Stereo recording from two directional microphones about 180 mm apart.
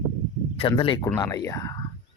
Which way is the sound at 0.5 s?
30° left (ahead or behind).